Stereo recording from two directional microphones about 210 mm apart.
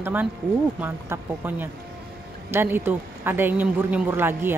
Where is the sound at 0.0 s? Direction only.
10° right (ahead or behind).